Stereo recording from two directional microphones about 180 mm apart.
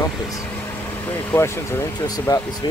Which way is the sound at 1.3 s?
15° left (ahead or behind).